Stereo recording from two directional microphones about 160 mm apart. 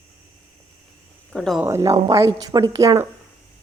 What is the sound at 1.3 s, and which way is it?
Speech, centre (ahead or behind).